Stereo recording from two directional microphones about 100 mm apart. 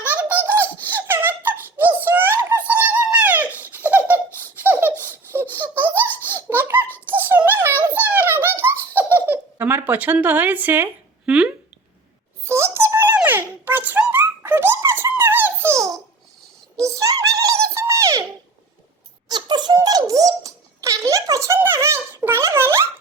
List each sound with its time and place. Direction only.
0.0 s giggle: 15° right (ahead or behind)
4.6 s laughter: 20° right (ahead or behind)
6.9 s giggle: 20° right (ahead or behind)
11.3 s speech: 5° right (ahead or behind)
12.5 s a sound: 25° right (ahead or behind)
15.1 s dog: 20° right (ahead or behind)
16.7 s a sound: 30° right (ahead or behind)
19.3 s music: 45° right (ahead or behind)
19.7 s a sound: 40° right (ahead or behind)